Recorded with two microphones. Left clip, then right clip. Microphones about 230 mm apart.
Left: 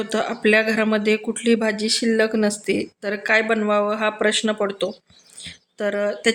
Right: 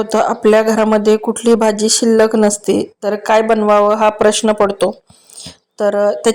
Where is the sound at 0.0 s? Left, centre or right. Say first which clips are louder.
Right 9 dB; centre.